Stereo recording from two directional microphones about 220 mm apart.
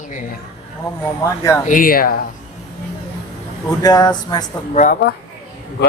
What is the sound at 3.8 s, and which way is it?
Speech, 15° left (ahead or behind).